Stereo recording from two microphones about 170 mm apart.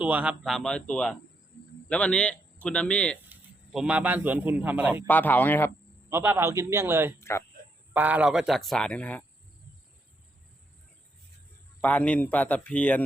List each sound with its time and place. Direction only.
0.0 s speech: 10° right (ahead or behind)
3.2 s a man's voice: 5° right (ahead or behind)
5.0 s speech: 10° left (ahead or behind)
6.1 s a man's voice: 15° right (ahead or behind)
7.2 s speech: 15° left (ahead or behind)
7.9 s speech: 10° right (ahead or behind); by 9.2 s 10° left (ahead or behind)
11.8 s speech: 10° left (ahead or behind)